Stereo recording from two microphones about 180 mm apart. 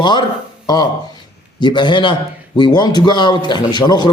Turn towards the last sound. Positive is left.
turn(degrees=25)  # may be behind; listen again after turning